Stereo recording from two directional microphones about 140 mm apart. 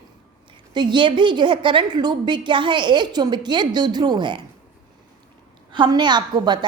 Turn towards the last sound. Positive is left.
turn(degrees=-30)  # may be behind; listen again after turning